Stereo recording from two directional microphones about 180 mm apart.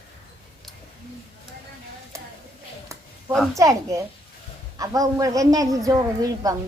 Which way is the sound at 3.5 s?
15° right (ahead or behind).